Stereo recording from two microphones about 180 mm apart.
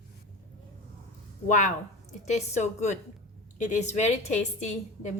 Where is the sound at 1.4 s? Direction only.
45° left (ahead or behind).